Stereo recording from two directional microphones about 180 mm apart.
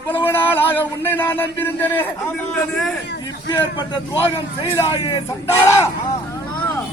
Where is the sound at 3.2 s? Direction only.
25° left (ahead or behind).